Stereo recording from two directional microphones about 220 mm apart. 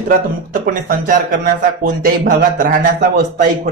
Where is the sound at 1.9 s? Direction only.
40° right (ahead or behind).